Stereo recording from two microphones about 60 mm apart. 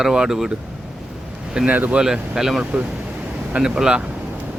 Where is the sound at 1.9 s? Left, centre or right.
Centre.